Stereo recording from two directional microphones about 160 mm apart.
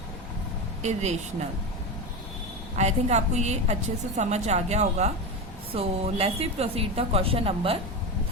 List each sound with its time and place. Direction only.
0.8 s a woman's voice: 45° right (ahead or behind)
2.7 s a woman's voice: 45° right (ahead or behind)